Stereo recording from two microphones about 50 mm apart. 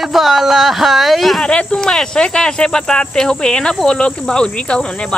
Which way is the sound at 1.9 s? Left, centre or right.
Centre.